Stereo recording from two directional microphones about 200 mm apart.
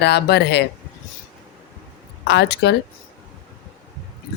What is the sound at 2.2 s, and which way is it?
Speech, 60° left (ahead or behind).